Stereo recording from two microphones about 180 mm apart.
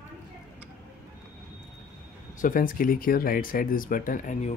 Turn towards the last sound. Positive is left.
turn(degrees=40)  # may be behind; listen again after turning